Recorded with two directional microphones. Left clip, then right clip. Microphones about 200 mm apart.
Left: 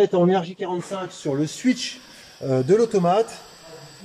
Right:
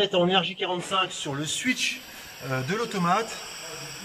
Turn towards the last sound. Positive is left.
turn(degrees=15)  # may be behind; listen again after turning